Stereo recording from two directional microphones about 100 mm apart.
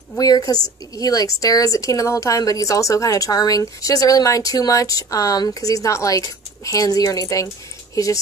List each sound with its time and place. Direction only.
0.2 s a woman's voice: 40° left (ahead or behind)